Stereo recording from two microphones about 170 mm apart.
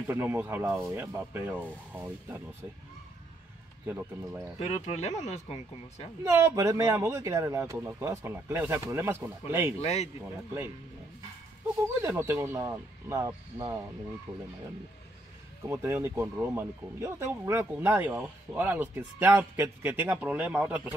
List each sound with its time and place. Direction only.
0.0 s speech: 15° right (ahead or behind)
3.8 s speech: 10° right (ahead or behind)
4.6 s speech: 40° left (ahead or behind)
6.2 s speech: 15° right (ahead or behind)
9.8 s speech: 40° left (ahead or behind)
11.8 s speech: 15° right (ahead or behind)
15.7 s speech: 15° right (ahead or behind)